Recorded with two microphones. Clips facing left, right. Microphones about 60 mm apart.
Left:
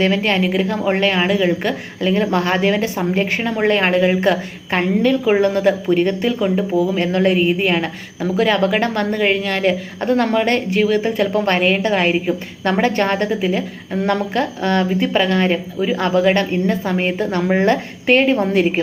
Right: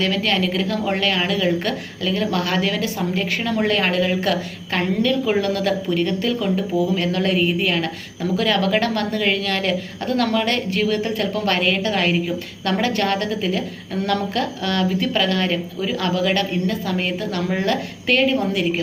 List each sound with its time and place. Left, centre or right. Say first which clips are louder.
0.0 s a woman's voice: left 4 dB; left
10.8 s a woman's voice: left 6 dB; centre
14.3 s a woman's voice: left 4 dB; left